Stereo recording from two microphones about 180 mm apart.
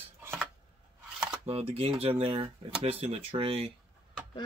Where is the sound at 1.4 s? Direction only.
35° right (ahead or behind).